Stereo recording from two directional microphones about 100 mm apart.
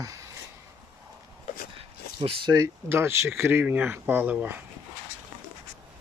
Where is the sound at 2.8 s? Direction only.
25° right (ahead or behind).